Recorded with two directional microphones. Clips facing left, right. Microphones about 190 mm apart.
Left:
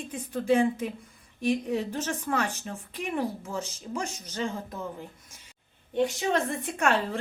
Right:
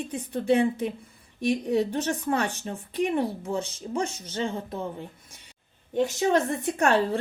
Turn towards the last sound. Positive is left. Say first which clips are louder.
# right 4 dB
turn(degrees=-35)  # may be behind; listen again after turning